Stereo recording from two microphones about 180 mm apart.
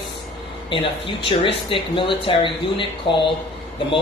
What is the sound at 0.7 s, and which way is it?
Speech, 30° left (ahead or behind).